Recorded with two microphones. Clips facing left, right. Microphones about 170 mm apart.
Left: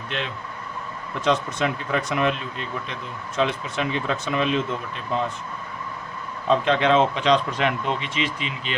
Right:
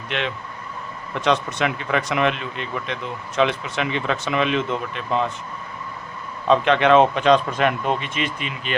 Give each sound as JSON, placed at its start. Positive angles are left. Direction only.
{"t": 1.2, "sound": "speech", "side_deg": -75}
{"t": 6.5, "sound": "speech", "side_deg": -65}